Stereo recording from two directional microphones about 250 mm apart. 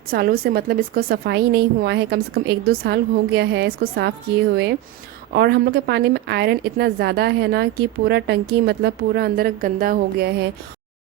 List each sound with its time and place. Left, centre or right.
0.1 s a woman's voice: right
5.3 s a woman's voice: right